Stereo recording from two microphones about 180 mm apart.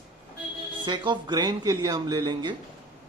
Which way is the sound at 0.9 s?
25° right (ahead or behind).